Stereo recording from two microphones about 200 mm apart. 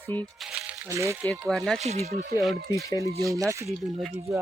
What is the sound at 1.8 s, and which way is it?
Speech, 35° right (ahead or behind).